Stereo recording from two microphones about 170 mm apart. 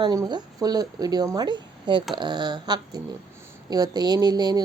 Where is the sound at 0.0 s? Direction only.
25° right (ahead or behind).